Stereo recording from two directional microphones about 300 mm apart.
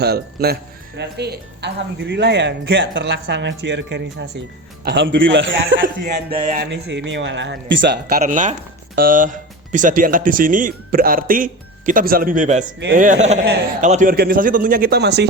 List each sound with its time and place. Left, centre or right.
0.0 s speech: right
6.3 s music: centre
6.6 s speech: right
8.2 s speech: right